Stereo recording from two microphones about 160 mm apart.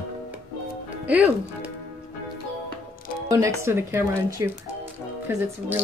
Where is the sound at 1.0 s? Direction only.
10° right (ahead or behind).